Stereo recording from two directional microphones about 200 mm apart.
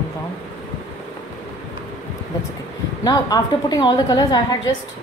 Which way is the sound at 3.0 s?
20° left (ahead or behind).